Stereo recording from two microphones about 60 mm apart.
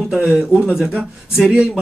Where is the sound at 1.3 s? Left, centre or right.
Centre.